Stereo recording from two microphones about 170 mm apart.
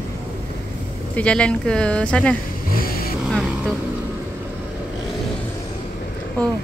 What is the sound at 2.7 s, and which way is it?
Vehicle, 60° left (ahead or behind).